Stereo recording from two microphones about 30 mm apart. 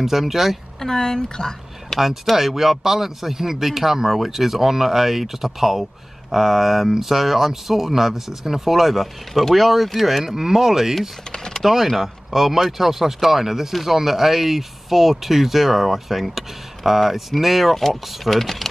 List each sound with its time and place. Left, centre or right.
0.0 s speech: centre
0.7 s speech: centre
1.9 s speech: centre
2.3 s speech: centre
10.2 s speech: centre
11.3 s typing: left
11.6 s speech: centre